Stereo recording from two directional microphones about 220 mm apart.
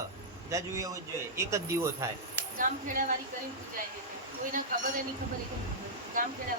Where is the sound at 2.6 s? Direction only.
35° right (ahead or behind).